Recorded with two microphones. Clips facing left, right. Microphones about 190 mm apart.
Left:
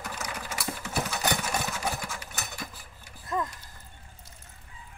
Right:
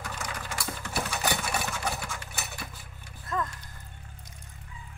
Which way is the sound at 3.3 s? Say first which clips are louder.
Left 1 dB; 15° left (ahead or behind).